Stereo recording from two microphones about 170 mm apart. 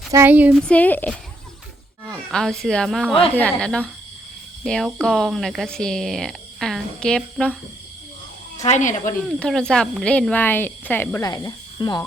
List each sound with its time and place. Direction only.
0.1 s speech: 10° right (ahead or behind)
0.7 s speech: 10° left (ahead or behind)
8.5 s speech: 40° left (ahead or behind)
9.4 s speech: 5° left (ahead or behind); by 12.0 s 25° left (ahead or behind)